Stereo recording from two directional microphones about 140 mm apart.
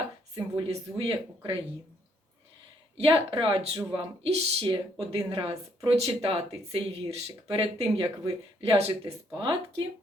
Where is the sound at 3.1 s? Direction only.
40° right (ahead or behind).